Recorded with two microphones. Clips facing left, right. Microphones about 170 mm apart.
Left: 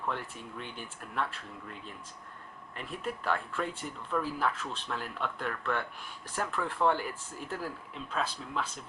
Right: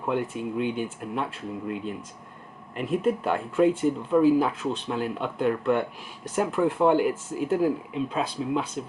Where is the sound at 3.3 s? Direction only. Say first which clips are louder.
Right 14 dB; 20° right (ahead or behind).